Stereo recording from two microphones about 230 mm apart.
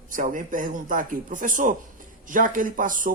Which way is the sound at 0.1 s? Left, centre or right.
Right.